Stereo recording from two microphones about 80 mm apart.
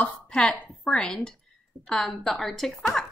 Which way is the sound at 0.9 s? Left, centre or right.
Centre.